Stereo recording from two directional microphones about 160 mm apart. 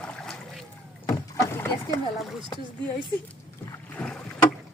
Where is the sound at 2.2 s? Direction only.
Centre (ahead or behind).